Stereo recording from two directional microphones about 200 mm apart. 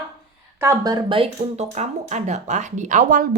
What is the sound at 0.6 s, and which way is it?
A woman's voice, 15° right (ahead or behind).